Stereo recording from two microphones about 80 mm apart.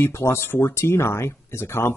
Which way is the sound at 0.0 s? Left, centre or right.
Left.